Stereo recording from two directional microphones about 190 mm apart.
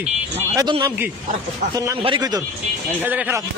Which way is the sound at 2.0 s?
25° right (ahead or behind).